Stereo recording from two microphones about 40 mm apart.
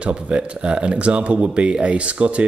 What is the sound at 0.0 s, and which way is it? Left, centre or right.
Speech, right.